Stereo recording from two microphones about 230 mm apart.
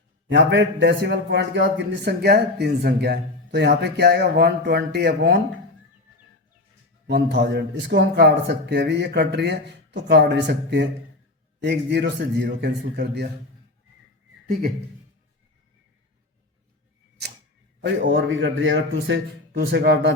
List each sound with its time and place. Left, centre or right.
0.3 s a man's voice: right
7.1 s a man's voice: right
17.7 s a man's voice: right